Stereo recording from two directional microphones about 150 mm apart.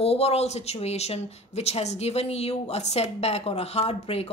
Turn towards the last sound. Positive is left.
turn(degrees=40)  # may be behind; listen again after turning